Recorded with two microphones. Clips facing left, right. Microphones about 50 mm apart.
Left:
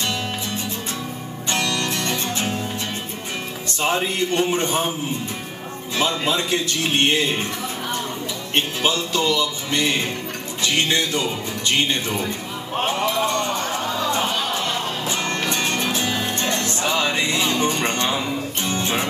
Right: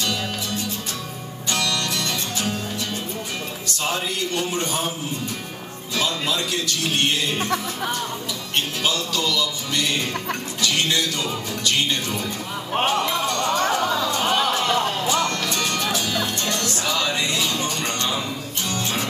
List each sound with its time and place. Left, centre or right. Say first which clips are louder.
0.0 s music: left 1 dB; left
3.8 s speech: left 4 dB; left
5.9 s speech: left 2 dB; left
8.5 s speech: left 3 dB; left
15.0 s music: right 1 dB; left